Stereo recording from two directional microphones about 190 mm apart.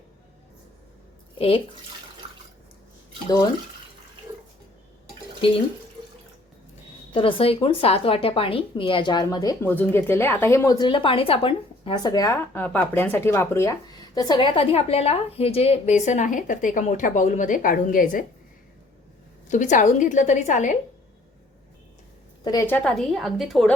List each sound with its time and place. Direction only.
1.4 s speech: 30° left (ahead or behind)
7.1 s a woman's voice: 25° left (ahead or behind); by 18.3 s 45° left (ahead or behind)
19.5 s a woman's voice: 40° left (ahead or behind)
22.5 s a woman's voice: 10° left (ahead or behind)